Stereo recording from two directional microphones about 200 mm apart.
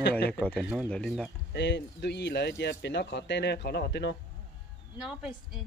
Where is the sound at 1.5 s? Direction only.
60° left (ahead or behind).